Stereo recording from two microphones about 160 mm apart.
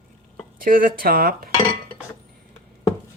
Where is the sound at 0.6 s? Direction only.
60° right (ahead or behind).